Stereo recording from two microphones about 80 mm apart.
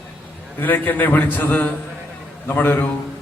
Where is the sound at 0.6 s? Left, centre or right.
Left.